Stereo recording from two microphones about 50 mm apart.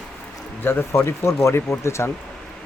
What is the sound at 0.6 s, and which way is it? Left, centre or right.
Speech, left.